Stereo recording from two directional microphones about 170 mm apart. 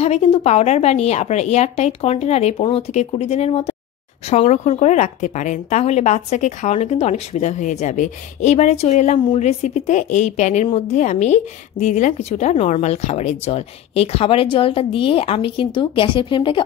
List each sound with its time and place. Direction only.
0.0 s a woman's voice: 40° left (ahead or behind)